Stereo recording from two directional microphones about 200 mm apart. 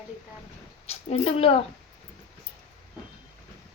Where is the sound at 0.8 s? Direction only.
30° left (ahead or behind).